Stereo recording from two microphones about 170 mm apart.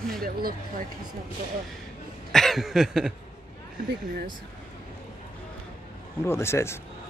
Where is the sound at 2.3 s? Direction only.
Centre (ahead or behind).